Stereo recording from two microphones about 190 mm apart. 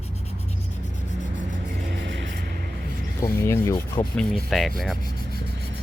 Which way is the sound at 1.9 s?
70° right (ahead or behind).